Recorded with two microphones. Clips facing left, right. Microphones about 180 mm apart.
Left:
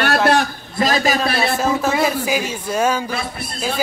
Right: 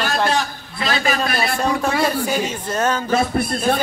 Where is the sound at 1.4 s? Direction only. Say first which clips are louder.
Left 2 dB; 5° left (ahead or behind).